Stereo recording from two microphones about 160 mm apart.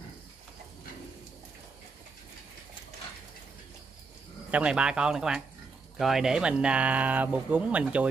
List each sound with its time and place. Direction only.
4.5 s speech: 5° right (ahead or behind)